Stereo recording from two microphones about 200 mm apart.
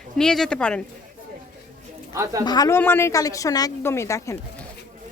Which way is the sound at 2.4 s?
20° left (ahead or behind).